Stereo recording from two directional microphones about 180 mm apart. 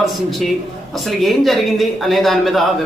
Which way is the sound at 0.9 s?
Centre (ahead or behind).